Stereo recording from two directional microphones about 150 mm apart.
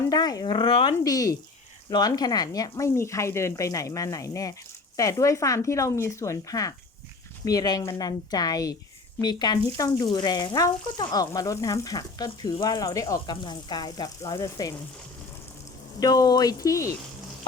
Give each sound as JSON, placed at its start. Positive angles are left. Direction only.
{"t": 0.1, "sound": "speech", "side_deg": 25}
{"t": 1.0, "sound": "speech", "side_deg": 25}
{"t": 16.0, "sound": "speech", "side_deg": 25}